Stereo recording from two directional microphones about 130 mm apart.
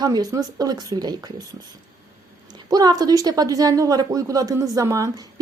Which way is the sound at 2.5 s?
30° right (ahead or behind).